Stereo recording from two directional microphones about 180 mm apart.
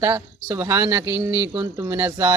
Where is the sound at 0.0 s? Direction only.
15° right (ahead or behind).